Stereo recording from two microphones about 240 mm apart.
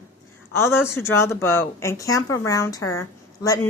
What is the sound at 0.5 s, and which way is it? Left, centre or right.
A woman's voice, centre.